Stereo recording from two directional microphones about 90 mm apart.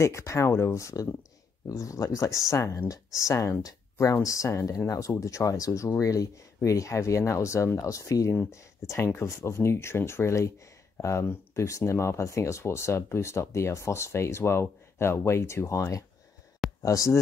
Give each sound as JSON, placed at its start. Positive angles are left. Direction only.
{"t": 0.0, "sound": "speech", "side_deg": 35}